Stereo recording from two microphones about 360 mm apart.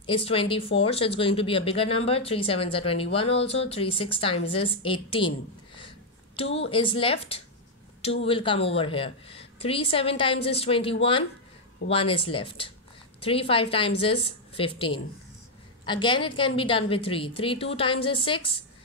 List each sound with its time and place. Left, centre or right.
0.0 s speech: centre
6.3 s speech: centre